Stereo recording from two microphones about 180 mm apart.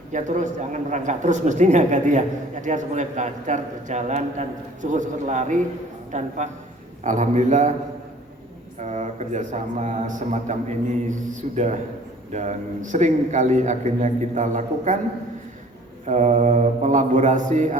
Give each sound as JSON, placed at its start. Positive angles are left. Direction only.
{"t": 0.1, "sound": "a man's voice", "side_deg": -45}
{"t": 8.8, "sound": "a man's voice", "side_deg": -40}
{"t": 16.0, "sound": "a man's voice", "side_deg": -40}